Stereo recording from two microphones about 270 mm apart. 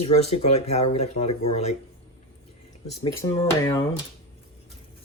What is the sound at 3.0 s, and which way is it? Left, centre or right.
Speech, centre.